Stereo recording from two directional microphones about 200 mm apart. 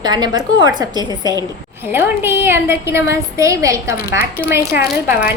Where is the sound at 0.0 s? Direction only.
20° right (ahead or behind).